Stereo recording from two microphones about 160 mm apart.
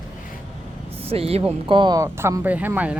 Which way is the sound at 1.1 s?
35° right (ahead or behind).